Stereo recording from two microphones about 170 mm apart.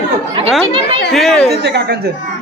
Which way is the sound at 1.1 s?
Centre (ahead or behind).